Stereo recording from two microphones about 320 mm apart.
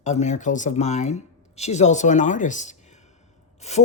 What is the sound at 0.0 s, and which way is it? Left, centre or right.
Speech, left.